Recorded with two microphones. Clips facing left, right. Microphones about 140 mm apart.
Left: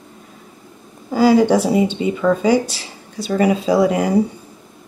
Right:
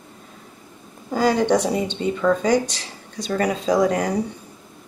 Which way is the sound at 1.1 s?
5° left (ahead or behind).